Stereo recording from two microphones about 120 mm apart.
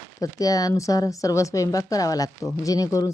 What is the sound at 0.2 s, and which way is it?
A woman's voice, 30° left (ahead or behind).